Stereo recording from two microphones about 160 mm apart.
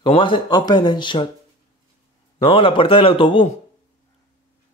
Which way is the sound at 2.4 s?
35° left (ahead or behind).